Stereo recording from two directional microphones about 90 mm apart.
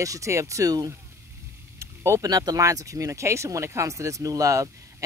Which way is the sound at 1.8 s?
30° right (ahead or behind).